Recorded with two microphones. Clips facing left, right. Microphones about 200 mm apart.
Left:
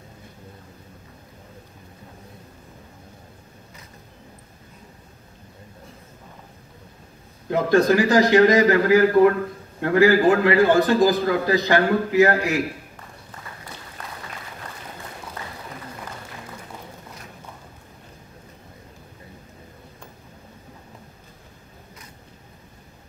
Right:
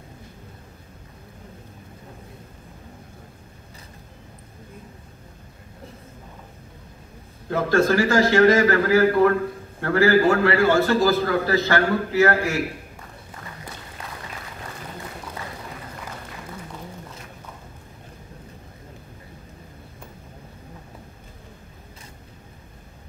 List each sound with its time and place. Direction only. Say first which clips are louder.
7.4 s a man's voice: left 2 dB; 15° left (ahead or behind)